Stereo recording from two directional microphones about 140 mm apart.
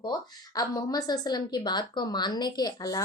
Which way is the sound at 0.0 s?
30° left (ahead or behind).